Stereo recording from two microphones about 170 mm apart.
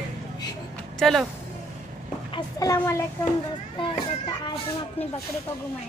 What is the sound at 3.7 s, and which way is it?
Speech, 30° left (ahead or behind).